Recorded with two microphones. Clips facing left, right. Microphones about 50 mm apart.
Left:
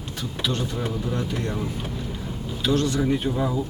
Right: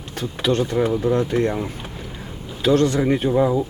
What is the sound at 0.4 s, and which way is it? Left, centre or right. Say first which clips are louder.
Speech: right 9 dB; right.